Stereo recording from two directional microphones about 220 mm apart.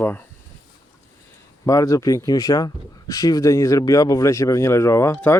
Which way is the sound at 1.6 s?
15° left (ahead or behind).